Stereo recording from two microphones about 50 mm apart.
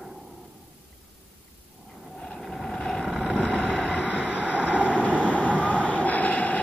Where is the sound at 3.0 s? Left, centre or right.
Centre.